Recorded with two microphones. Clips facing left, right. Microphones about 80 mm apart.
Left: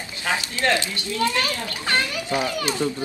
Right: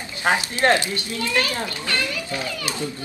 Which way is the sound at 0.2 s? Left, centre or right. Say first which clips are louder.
Right 4 dB; right.